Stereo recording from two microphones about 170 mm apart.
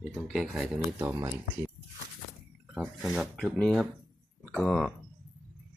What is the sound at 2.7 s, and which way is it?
Speech, centre (ahead or behind).